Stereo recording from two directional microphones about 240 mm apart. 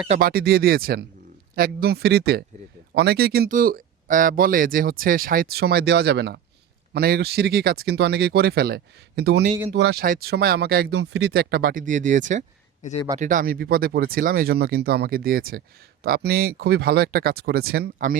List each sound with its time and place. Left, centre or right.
0.1 s speech: right
12.8 s speech: left
13.1 s speech: right